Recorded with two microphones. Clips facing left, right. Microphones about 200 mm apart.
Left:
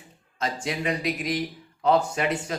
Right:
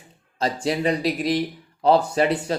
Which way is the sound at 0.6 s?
35° right (ahead or behind).